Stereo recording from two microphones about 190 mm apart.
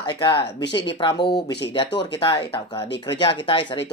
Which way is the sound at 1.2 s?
55° left (ahead or behind).